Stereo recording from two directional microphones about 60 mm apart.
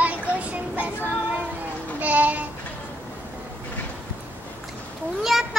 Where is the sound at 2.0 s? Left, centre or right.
Right.